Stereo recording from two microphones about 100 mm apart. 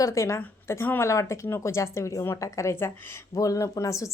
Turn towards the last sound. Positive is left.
turn(degrees=30)  # may be behind; listen again after turning